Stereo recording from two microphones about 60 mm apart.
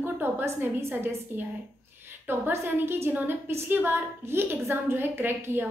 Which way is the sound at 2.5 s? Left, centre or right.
Right.